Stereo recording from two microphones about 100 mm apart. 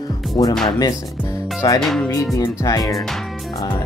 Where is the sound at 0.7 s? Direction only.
40° left (ahead or behind).